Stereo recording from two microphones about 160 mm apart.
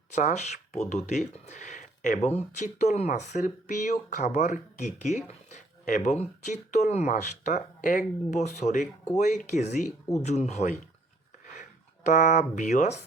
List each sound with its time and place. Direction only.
0.1 s speech: 45° left (ahead or behind)
12.0 s speech: 45° left (ahead or behind)